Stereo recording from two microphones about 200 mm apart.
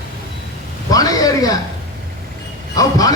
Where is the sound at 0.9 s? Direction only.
20° left (ahead or behind).